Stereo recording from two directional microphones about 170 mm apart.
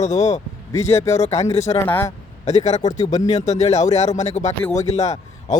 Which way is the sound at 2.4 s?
40° left (ahead or behind).